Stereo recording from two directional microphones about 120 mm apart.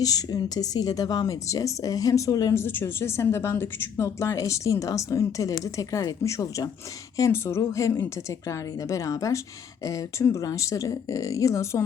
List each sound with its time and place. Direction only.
0.0 s speech: 30° left (ahead or behind)